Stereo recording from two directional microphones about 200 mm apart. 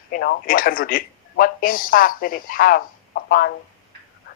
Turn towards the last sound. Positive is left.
turn(degrees=50)  # may be behind; listen again after turning